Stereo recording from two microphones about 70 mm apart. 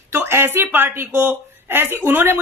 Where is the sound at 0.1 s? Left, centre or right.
Right.